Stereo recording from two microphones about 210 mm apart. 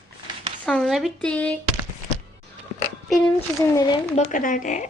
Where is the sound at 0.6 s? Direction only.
5° left (ahead or behind).